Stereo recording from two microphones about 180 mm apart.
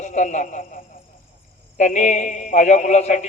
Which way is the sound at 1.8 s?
40° left (ahead or behind).